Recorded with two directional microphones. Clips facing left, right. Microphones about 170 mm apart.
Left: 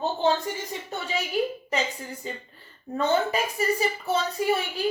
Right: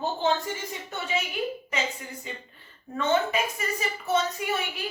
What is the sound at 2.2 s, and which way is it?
A woman's voice, 35° left (ahead or behind).